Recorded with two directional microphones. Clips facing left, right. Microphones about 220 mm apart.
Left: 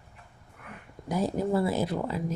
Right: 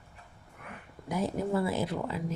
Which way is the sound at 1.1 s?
35° left (ahead or behind).